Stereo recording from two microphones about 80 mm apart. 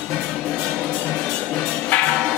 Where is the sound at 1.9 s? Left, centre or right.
Centre.